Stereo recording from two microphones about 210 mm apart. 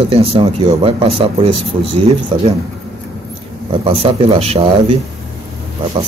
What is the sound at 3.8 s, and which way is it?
A man's voice, 25° right (ahead or behind).